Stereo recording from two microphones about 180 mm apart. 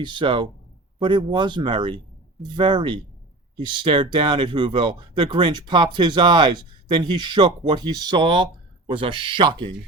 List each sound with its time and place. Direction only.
0.0 s speech: 25° right (ahead or behind)